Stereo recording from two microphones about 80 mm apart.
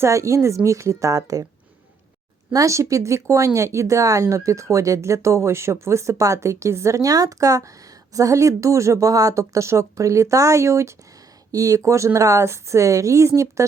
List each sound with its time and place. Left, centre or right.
0.0 s speech: right
2.5 s speech: right